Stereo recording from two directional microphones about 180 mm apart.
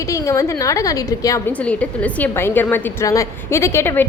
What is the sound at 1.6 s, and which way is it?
A woman's voice, 5° left (ahead or behind).